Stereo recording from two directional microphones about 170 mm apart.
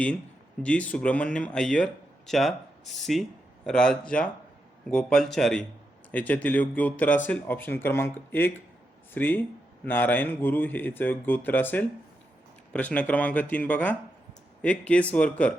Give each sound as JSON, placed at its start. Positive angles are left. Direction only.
{"t": 0.6, "sound": "speech", "side_deg": 10}